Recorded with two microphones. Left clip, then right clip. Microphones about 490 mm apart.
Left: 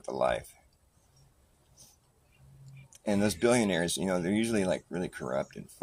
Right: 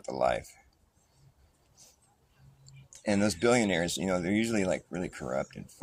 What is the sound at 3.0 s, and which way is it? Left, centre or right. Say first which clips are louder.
Speech: even; left.